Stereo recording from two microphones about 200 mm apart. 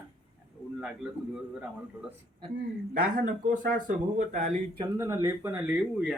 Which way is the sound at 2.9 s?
40° right (ahead or behind).